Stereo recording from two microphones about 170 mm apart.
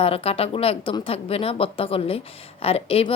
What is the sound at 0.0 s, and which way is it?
A woman's voice, 35° left (ahead or behind).